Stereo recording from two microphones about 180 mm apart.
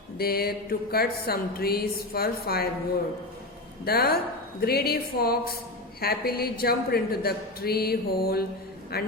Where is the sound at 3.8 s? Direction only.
60° left (ahead or behind).